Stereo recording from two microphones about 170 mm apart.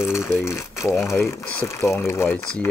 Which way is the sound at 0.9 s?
15° left (ahead or behind).